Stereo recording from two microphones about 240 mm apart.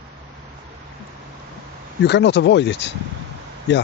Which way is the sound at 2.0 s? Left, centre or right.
Left.